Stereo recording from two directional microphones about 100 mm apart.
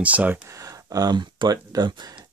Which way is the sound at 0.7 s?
40° right (ahead or behind).